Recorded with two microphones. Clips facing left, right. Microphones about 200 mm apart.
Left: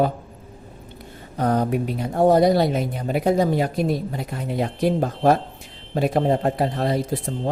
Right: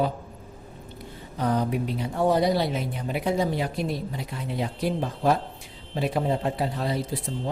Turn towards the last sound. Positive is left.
turn(degrees=50)  # may be behind; listen again after turning